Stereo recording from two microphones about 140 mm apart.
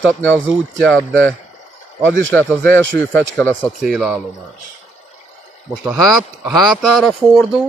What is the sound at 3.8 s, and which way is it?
Speech, centre (ahead or behind).